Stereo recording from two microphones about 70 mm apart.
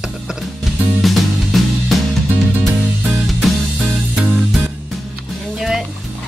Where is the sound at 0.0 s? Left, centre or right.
Centre.